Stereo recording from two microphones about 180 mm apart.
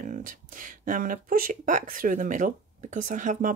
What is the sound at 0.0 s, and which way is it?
Speech, 45° right (ahead or behind).